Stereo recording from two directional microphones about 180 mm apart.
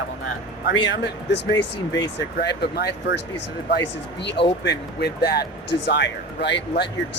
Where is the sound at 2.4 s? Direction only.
65° left (ahead or behind).